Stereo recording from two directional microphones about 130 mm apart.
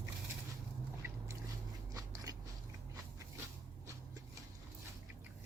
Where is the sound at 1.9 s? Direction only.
30° right (ahead or behind).